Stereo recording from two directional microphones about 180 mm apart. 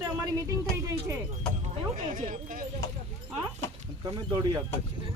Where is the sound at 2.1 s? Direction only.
50° right (ahead or behind).